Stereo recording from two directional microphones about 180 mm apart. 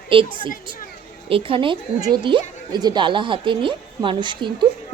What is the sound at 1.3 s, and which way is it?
A woman's voice, 30° right (ahead or behind).